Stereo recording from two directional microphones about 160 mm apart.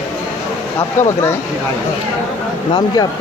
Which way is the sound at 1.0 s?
15° left (ahead or behind).